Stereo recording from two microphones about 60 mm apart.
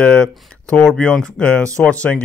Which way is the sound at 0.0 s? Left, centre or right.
Centre.